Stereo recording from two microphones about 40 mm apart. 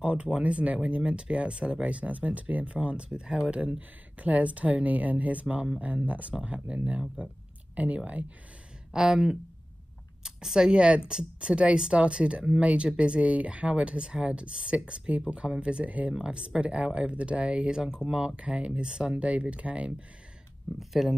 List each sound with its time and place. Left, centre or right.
0.0 s speech: right
4.2 s speech: right
8.9 s speech: centre; by 16.1 s right
16.1 s speech: right
21.0 s speech: centre